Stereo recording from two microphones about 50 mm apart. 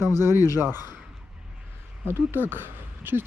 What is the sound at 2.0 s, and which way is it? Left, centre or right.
Speech, right.